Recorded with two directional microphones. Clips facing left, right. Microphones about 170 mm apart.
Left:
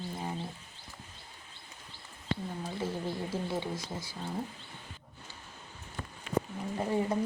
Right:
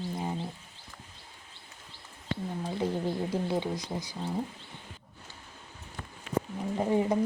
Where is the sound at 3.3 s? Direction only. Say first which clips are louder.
Right 4 dB; 15° right (ahead or behind).